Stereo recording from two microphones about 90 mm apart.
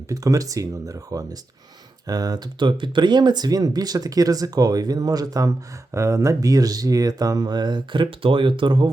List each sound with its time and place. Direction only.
0.1 s speech: 40° right (ahead or behind); by 8.9 s 60° right (ahead or behind)